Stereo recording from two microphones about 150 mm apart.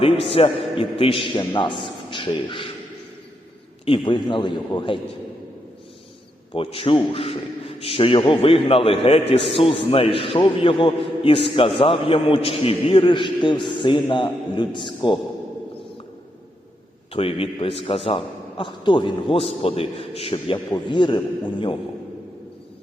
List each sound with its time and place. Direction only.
0.0 s a man's voice: 40° left (ahead or behind)
3.8 s a man's voice: 35° left (ahead or behind)
6.5 s a man's voice: 40° left (ahead or behind)
17.1 s a man's voice: 40° left (ahead or behind)